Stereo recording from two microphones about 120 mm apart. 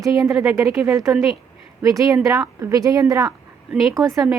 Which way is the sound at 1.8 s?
25° right (ahead or behind).